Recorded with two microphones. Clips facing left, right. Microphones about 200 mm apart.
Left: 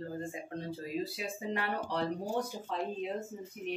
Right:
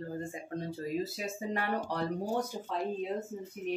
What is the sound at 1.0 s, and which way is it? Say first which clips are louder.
Speech: right 1 dB; 45° right (ahead or behind).